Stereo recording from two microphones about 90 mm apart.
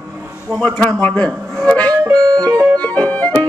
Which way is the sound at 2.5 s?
40° right (ahead or behind).